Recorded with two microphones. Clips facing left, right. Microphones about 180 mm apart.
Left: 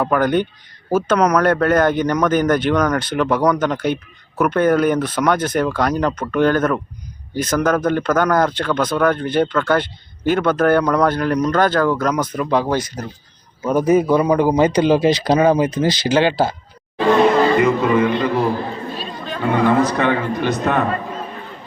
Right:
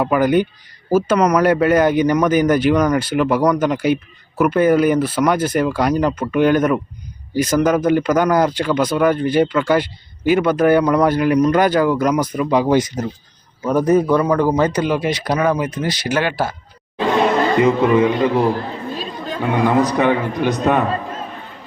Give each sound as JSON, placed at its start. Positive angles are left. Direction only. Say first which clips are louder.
{"t": 0.0, "sound": "speech", "louder": "right 2 dB", "side_deg": -10}
{"t": 13.7, "sound": "speech", "louder": "even", "side_deg": 5}
{"t": 14.8, "sound": "speech", "louder": "left 4 dB", "side_deg": 30}
{"t": 17.6, "sound": "speech", "louder": "right 2 dB", "side_deg": -15}